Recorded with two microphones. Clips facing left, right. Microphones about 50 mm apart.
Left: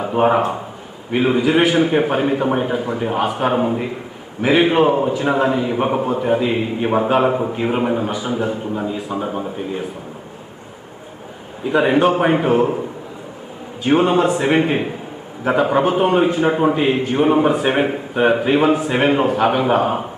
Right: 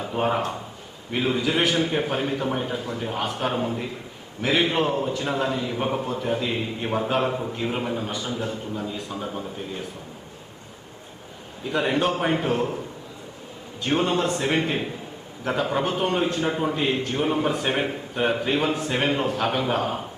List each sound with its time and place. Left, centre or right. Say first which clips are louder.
0.0 s a man's voice: left 9 dB; left
8.9 s a man's voice: left 8 dB; centre
9.1 s a man's voice: left 8 dB; left
11.6 s a man's voice: left 8 dB; centre
13.8 s a man's voice: left 8 dB; centre